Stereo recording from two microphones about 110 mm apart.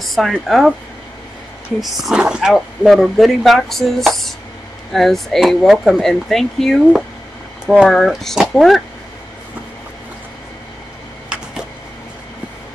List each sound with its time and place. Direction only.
0.0 s speech: centre (ahead or behind)
1.8 s speech: 5° right (ahead or behind)